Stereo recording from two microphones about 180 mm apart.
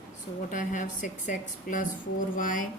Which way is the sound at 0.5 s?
45° left (ahead or behind).